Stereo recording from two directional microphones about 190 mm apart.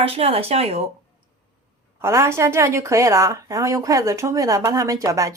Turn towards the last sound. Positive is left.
turn(degrees=-15)  # may be behind; listen again after turning